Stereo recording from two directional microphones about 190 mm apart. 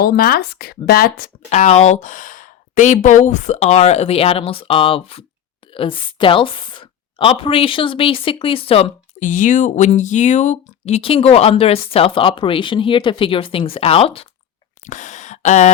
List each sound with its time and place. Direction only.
0.0 s speech: 55° left (ahead or behind)
1.5 s a woman's voice: 35° left (ahead or behind)
14.8 s a sound: 40° left (ahead or behind)